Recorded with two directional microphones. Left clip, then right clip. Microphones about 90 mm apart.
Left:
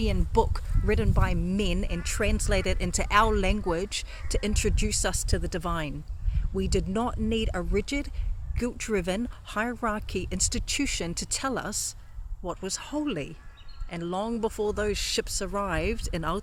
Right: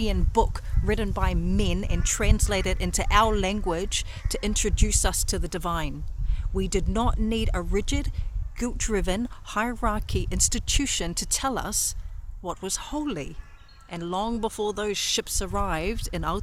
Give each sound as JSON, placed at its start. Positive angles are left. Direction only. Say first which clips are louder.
{"t": 0.2, "sound": "speech", "louder": "right 1 dB", "side_deg": -40}